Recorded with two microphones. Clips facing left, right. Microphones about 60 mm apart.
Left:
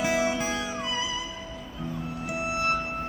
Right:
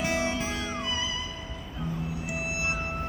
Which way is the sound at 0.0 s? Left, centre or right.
Centre.